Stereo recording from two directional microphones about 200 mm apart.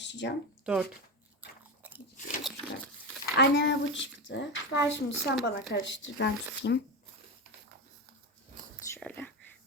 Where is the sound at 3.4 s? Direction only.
60° left (ahead or behind).